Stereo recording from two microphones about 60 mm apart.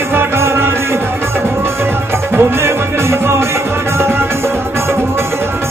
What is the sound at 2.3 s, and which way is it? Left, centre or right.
Music, right.